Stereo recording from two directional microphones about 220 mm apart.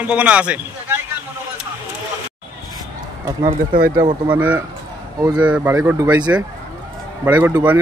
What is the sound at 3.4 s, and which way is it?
Speech, 40° right (ahead or behind).